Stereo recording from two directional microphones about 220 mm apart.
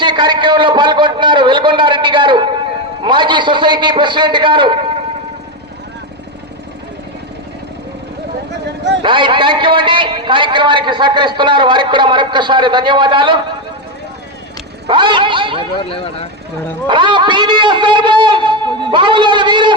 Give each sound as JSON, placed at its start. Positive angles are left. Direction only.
{"t": 0.0, "sound": "a sound", "side_deg": -20}
{"t": 8.6, "sound": "a sound", "side_deg": -50}
{"t": 9.0, "sound": "a man's voice", "side_deg": -20}
{"t": 14.8, "sound": "speech", "side_deg": -20}
{"t": 15.9, "sound": "speech", "side_deg": 25}
{"t": 16.9, "sound": "a man's voice", "side_deg": -20}